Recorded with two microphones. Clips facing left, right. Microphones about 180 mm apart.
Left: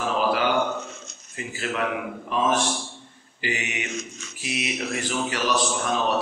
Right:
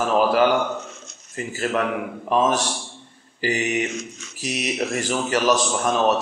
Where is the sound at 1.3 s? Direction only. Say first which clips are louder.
Right 6 dB; 45° right (ahead or behind).